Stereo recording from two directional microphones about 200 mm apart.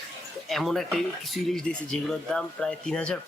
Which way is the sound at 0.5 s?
Centre (ahead or behind).